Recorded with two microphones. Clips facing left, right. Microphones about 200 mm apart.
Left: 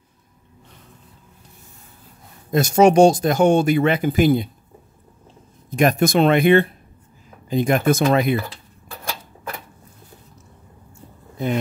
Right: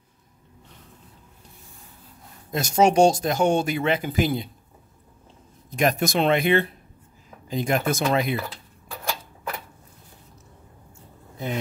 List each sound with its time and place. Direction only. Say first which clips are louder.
2.5 s speech: left 5 dB; 55° left (ahead or behind)
5.8 s speech: left 5 dB; 55° left (ahead or behind)